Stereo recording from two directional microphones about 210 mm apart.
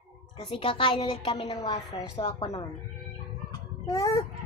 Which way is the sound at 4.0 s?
20° left (ahead or behind).